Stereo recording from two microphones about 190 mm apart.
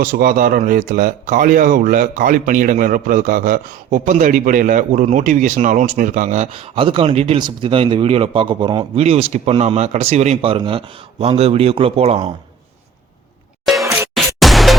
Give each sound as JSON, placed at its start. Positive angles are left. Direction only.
{"t": 0.0, "sound": "speech", "side_deg": -45}
{"t": 13.8, "sound": "music", "side_deg": -15}
{"t": 14.3, "sound": "music", "side_deg": 0}